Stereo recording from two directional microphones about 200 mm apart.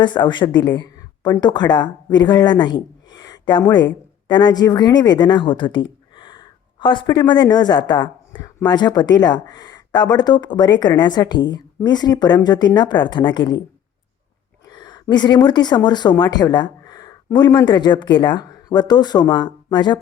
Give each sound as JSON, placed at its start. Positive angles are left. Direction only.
{"t": 0.0, "sound": "a woman's voice", "side_deg": 20}
{"t": 3.2, "sound": "a sound", "side_deg": 20}
{"t": 4.3, "sound": "a woman's voice", "side_deg": 20}
{"t": 14.7, "sound": "speech", "side_deg": 20}